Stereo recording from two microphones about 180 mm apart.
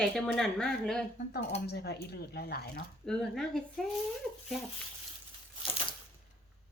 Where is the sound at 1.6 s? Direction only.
65° left (ahead or behind).